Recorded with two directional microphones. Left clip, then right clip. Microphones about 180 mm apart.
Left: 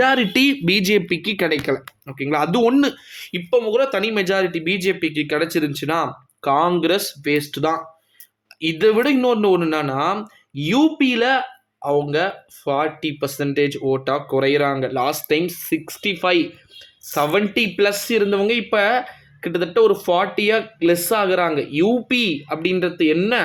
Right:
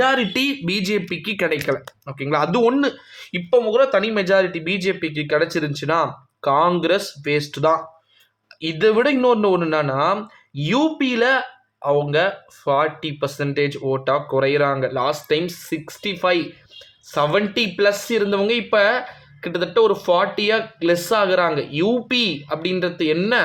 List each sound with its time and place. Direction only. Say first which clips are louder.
0.0 s speech: left 2 dB; 25° left (ahead or behind)